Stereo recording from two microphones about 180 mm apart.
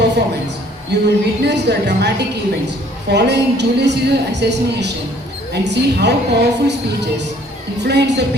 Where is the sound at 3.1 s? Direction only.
70° right (ahead or behind).